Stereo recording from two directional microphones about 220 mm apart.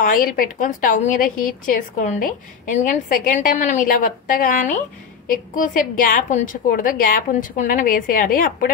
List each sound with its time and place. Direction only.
0.0 s a woman's voice: 40° left (ahead or behind)